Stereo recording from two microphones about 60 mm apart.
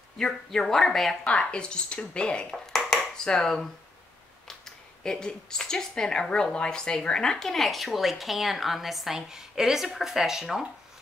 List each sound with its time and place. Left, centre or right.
0.2 s speech: centre
1.2 s speech: centre
2.5 s a sound: centre
4.5 s speech: centre